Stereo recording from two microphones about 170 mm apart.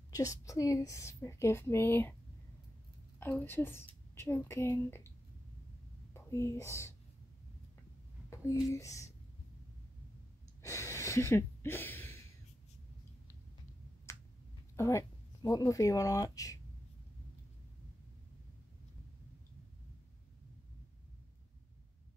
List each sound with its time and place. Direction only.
0.1 s a woman's voice: 20° left (ahead or behind)
3.2 s a woman's voice: 15° left (ahead or behind)
6.1 s speech: 15° left (ahead or behind)
8.6 s speech: 20° left (ahead or behind)
10.6 s gasp: 15° left (ahead or behind)
14.1 s a sound: 15° left (ahead or behind)
14.8 s speech: 15° left (ahead or behind)